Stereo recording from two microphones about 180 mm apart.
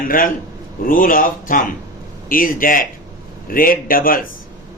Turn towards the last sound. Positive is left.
turn(degrees=50)  # may be behind; listen again after turning